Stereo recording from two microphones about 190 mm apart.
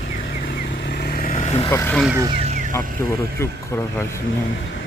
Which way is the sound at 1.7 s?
10° left (ahead or behind).